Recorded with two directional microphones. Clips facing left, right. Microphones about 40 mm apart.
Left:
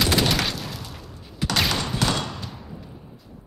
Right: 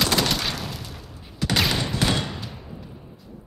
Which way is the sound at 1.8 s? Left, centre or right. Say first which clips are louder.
Even; centre.